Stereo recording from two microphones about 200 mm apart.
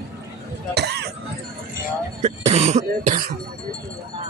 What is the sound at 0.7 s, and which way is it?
Cough, 55° right (ahead or behind).